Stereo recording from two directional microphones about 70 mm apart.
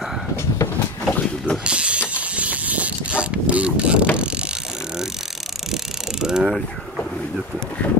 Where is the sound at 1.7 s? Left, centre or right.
Centre.